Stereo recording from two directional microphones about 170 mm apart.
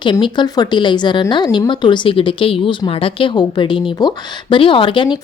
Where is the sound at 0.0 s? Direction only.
25° left (ahead or behind).